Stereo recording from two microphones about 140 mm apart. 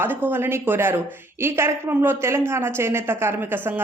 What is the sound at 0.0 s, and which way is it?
A woman's voice, 15° right (ahead or behind).